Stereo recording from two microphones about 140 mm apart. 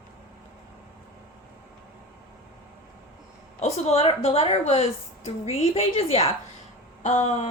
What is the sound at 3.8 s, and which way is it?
A woman's voice, 50° left (ahead or behind).